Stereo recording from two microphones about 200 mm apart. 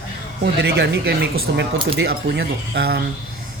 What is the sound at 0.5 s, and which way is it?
A woman's voice, 55° right (ahead or behind).